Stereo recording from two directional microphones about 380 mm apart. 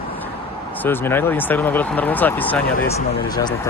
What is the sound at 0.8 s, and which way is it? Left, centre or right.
Speech, centre.